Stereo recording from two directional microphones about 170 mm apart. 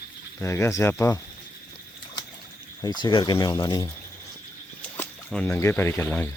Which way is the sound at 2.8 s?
25° left (ahead or behind).